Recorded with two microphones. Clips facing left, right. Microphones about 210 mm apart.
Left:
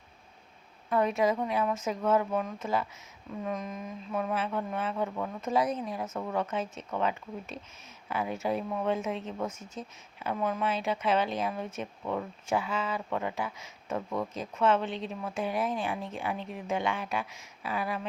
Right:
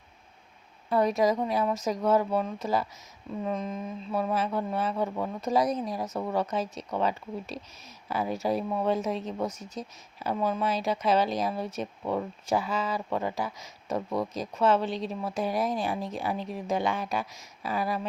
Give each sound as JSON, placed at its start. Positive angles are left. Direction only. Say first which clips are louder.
{"t": 0.9, "sound": "speech", "louder": "right 2 dB", "side_deg": -35}